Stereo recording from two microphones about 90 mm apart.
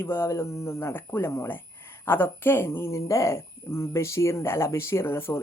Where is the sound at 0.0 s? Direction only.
30° left (ahead or behind).